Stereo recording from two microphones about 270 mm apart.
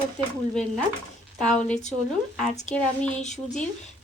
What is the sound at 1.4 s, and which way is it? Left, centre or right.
A woman's voice, centre.